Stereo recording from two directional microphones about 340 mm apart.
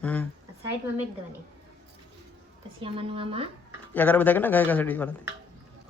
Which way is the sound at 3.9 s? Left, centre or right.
Centre.